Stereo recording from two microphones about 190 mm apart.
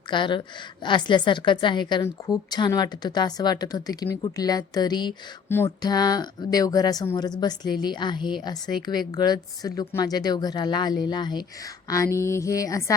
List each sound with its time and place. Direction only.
0.1 s speech: 25° left (ahead or behind)